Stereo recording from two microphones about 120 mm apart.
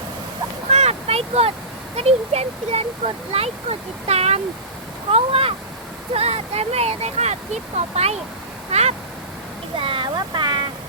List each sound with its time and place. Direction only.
0.7 s vehicle: 60° right (ahead or behind)
2.0 s speech: 60° right (ahead or behind)
9.7 s a sound: 45° right (ahead or behind)